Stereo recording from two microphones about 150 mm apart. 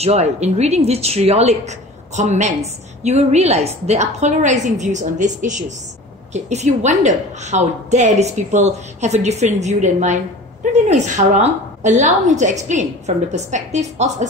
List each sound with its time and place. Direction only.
0.0 s a woman's voice: 45° right (ahead or behind)